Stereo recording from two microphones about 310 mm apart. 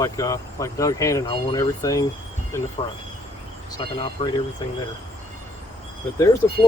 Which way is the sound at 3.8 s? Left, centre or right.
Centre.